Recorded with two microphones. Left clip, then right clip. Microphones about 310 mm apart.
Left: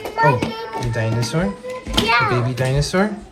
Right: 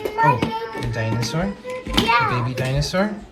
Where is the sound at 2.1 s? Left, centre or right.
Left.